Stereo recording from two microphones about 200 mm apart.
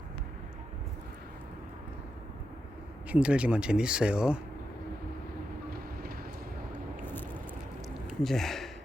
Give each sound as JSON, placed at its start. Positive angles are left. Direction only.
{"t": 3.1, "sound": "speech", "side_deg": -5}
{"t": 7.0, "sound": "vehicle", "side_deg": 10}
{"t": 8.0, "sound": "a sound", "side_deg": 0}